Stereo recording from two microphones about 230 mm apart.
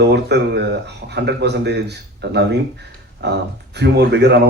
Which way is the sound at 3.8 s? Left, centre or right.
Right.